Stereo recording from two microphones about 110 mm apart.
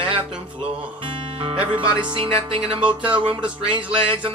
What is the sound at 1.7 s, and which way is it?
Speech, 50° right (ahead or behind).